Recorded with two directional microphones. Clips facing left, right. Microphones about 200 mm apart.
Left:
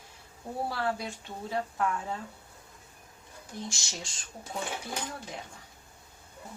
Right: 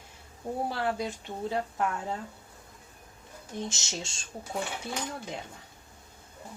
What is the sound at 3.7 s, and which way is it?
Speech, 25° right (ahead or behind).